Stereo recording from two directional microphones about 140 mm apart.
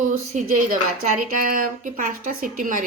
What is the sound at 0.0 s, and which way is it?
A woman's voice, 80° right.